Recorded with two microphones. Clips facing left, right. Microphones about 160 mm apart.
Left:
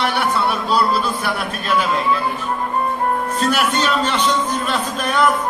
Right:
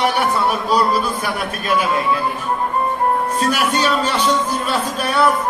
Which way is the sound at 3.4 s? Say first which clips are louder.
Left 1 dB; 10° right (ahead or behind).